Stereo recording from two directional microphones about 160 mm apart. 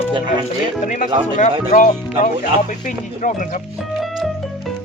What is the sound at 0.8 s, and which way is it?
Speech, 50° left (ahead or behind).